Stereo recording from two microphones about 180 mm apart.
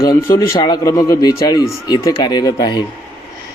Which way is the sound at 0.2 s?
15° left (ahead or behind).